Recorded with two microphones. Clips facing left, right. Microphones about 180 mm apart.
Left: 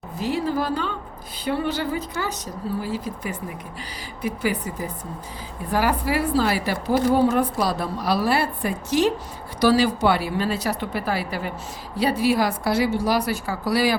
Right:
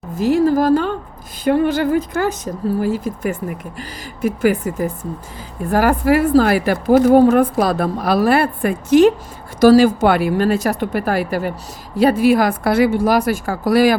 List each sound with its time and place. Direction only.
0.2 s a woman's voice: 45° right (ahead or behind)